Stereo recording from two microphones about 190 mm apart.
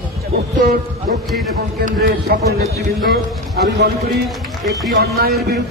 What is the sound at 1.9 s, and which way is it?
Speech, 55° right (ahead or behind).